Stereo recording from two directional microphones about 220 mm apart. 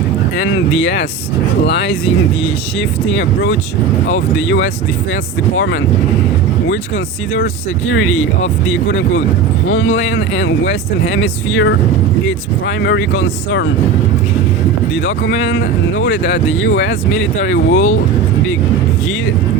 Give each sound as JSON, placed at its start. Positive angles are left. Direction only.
{"t": 1.6, "sound": "speech", "side_deg": 55}
{"t": 4.4, "sound": "speech", "side_deg": 55}
{"t": 7.9, "sound": "speech", "side_deg": 70}
{"t": 15.0, "sound": "speech", "side_deg": 55}